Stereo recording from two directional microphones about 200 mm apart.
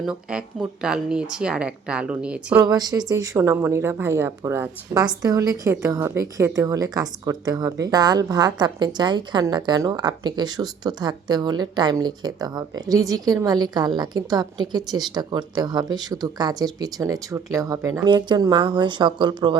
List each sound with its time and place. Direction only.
0.0 s speech: 5° right (ahead or behind)
2.6 s a woman's voice: 20° right (ahead or behind)